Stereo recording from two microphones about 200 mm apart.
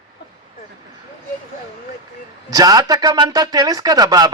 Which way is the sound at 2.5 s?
20° right (ahead or behind).